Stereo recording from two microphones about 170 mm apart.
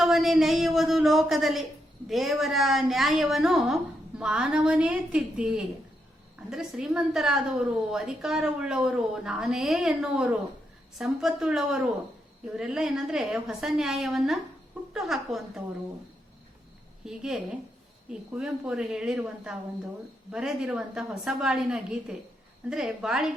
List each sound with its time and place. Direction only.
0.0 s a woman's voice: centre (ahead or behind)
17.1 s a woman's voice: 5° right (ahead or behind)